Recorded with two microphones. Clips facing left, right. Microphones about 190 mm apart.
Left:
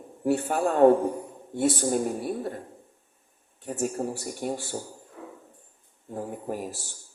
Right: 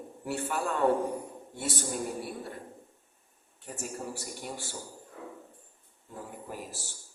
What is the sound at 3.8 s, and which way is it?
Speech, 50° left (ahead or behind).